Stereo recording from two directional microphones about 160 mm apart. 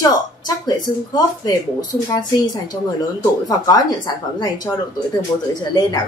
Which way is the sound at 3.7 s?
25° left (ahead or behind).